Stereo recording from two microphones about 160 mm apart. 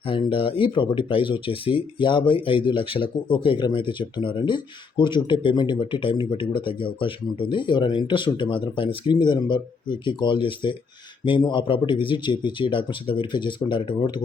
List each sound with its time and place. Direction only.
0.1 s speech: 35° left (ahead or behind)